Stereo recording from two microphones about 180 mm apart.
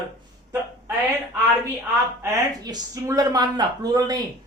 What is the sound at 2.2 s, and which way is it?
A woman's voice, 20° right (ahead or behind).